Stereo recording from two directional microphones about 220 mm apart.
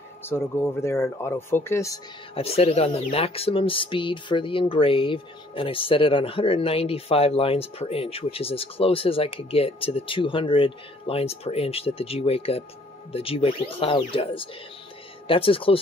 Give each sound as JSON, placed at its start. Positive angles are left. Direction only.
{"t": 0.2, "sound": "speech", "side_deg": 10}
{"t": 2.3, "sound": "speech", "side_deg": 25}